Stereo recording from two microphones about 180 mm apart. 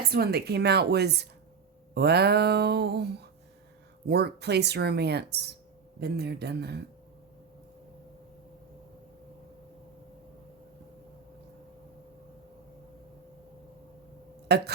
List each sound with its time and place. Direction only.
0.1 s speech: 60° right (ahead or behind)
14.5 s speech: 65° right (ahead or behind)